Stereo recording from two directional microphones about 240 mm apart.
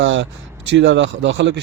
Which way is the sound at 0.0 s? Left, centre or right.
Right.